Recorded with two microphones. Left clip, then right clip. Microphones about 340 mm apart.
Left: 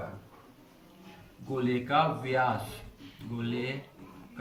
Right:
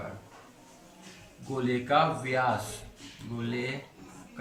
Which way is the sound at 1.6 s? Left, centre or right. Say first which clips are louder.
Right 2 dB; centre.